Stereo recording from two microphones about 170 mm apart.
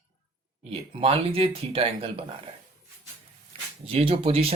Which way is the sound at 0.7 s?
35° right (ahead or behind).